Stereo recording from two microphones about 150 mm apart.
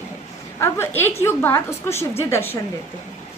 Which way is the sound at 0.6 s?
15° left (ahead or behind).